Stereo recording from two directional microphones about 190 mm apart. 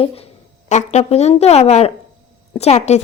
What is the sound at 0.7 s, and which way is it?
Speech, 40° left (ahead or behind).